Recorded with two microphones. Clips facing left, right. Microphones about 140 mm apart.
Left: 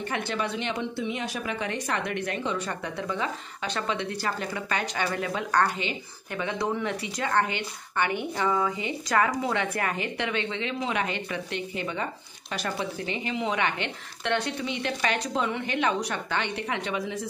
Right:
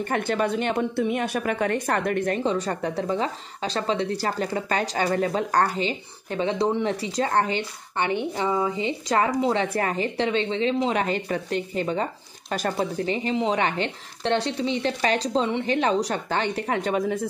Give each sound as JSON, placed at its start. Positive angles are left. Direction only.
{"t": 0.1, "sound": "speech", "side_deg": -45}